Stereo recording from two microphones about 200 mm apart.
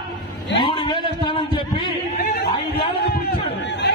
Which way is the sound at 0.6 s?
25° left (ahead or behind).